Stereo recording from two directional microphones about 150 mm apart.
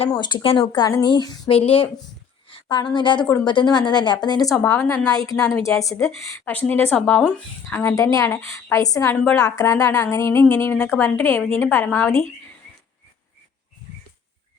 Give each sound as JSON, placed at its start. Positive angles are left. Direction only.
{"t": 0.1, "sound": "a woman's voice", "side_deg": 30}
{"t": 4.6, "sound": "a woman's voice", "side_deg": 15}
{"t": 5.1, "sound": "a woman's voice", "side_deg": 25}
{"t": 7.7, "sound": "a woman's voice", "side_deg": 20}